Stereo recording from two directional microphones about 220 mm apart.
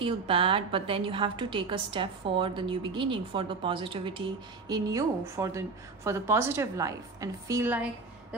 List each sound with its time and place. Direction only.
0.0 s a woman's voice: 25° right (ahead or behind)